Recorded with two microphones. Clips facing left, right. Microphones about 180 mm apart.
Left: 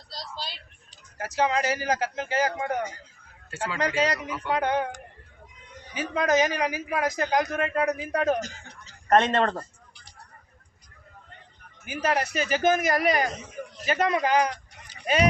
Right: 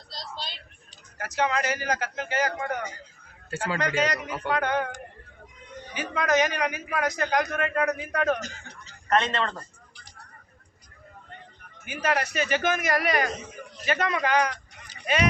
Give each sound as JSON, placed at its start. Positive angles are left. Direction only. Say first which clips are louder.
{"t": 0.1, "sound": "speech", "louder": "left 1 dB", "side_deg": 5}
{"t": 1.2, "sound": "a man's voice", "louder": "left 2 dB", "side_deg": 30}
{"t": 5.9, "sound": "a man's voice", "louder": "left 1 dB", "side_deg": 30}
{"t": 9.0, "sound": "a man's voice", "louder": "left 4 dB", "side_deg": 50}
{"t": 11.9, "sound": "speech", "louder": "left 1 dB", "side_deg": 35}